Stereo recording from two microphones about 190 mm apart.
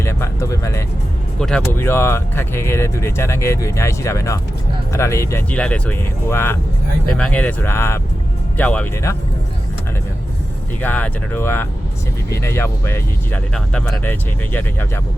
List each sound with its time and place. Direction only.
0.0 s music: 15° left (ahead or behind)
1.4 s speech: 5° left (ahead or behind)
10.8 s speech: 10° left (ahead or behind)